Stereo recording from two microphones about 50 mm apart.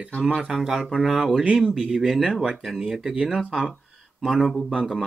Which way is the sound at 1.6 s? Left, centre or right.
Centre.